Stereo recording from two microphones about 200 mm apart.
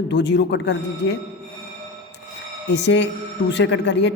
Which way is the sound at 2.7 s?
60° left (ahead or behind).